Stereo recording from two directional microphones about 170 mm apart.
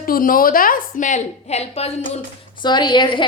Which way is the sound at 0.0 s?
55° left (ahead or behind).